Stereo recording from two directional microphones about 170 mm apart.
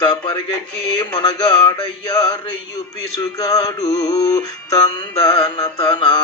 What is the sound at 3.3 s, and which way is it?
Synthetic singing, 25° left (ahead or behind).